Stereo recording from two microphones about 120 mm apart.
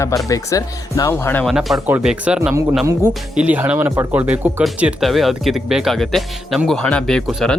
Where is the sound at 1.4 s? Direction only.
Centre (ahead or behind).